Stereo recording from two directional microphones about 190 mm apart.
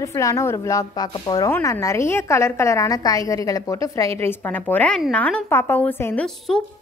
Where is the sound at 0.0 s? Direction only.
15° left (ahead or behind).